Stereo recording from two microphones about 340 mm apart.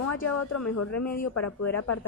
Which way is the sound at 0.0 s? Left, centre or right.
Left.